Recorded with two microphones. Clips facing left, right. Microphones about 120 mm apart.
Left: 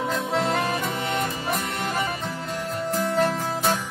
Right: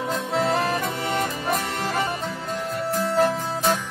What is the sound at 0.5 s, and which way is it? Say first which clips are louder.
Music: right 2 dB; 35° right (ahead or behind).